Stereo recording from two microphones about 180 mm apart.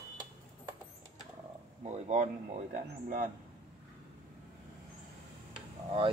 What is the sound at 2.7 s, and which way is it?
Speech, 50° right (ahead or behind).